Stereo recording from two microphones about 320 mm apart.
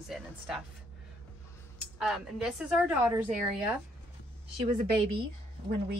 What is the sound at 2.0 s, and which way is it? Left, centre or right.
Speech, centre.